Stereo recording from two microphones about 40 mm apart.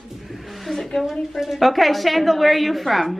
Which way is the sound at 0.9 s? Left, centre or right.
Centre.